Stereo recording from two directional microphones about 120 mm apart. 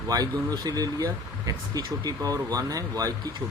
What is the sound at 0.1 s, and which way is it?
Speech, 30° right (ahead or behind).